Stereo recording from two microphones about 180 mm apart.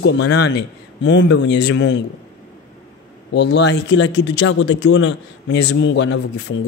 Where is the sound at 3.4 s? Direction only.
75° left (ahead or behind).